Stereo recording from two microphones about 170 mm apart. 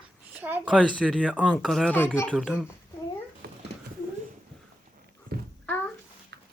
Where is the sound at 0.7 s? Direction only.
5° left (ahead or behind).